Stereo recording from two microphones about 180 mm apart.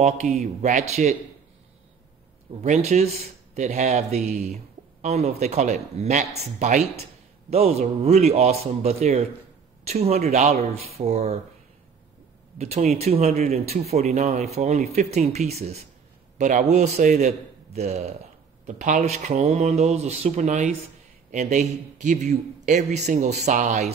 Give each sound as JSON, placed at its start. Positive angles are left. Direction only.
{"t": 0.6, "sound": "a man's voice", "side_deg": -40}
{"t": 2.6, "sound": "a man's voice", "side_deg": -40}
{"t": 12.5, "sound": "a man's voice", "side_deg": -35}